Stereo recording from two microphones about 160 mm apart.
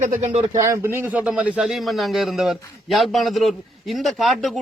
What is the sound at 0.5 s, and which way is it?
Speech, 20° right (ahead or behind).